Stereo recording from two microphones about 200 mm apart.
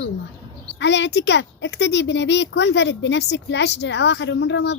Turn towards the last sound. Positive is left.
turn(degrees=60)  # may be behind; listen again after turning